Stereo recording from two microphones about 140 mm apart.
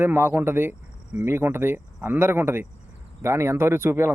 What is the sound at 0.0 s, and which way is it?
Speech, 15° right (ahead or behind).